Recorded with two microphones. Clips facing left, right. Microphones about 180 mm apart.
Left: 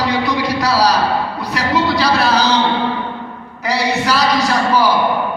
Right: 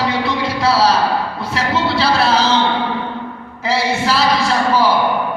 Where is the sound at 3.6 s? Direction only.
25° right (ahead or behind).